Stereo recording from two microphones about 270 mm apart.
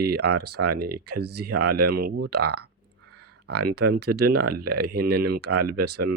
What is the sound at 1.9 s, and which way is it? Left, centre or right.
Speech, right.